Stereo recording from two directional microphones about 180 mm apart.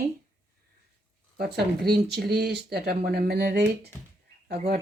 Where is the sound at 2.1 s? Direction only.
65° right (ahead or behind).